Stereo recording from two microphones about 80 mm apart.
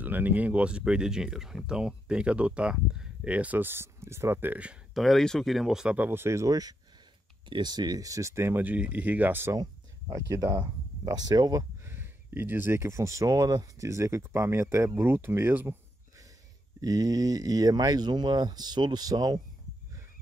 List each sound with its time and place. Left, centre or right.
0.0 s speech: right
4.9 s speech: centre
5.9 s speech: right
7.4 s speech: right
8.6 s speech: centre
9.6 s speech: right
10.6 s speech: right
11.8 s speech: right
13.8 s speech: right
16.8 s speech: right